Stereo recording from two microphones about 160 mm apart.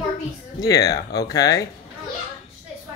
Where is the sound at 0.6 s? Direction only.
20° left (ahead or behind).